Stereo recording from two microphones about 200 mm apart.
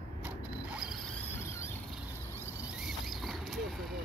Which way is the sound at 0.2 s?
5° right (ahead or behind).